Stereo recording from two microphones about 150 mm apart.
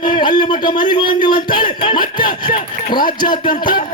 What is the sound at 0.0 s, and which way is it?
A man's voice, 30° left (ahead or behind).